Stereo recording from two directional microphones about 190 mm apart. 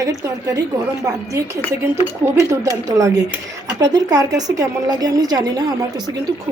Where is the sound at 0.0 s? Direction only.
20° right (ahead or behind).